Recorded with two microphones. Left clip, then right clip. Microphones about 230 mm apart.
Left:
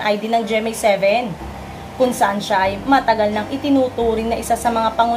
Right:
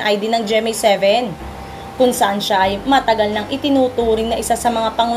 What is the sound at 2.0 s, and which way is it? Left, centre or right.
A woman's voice, right.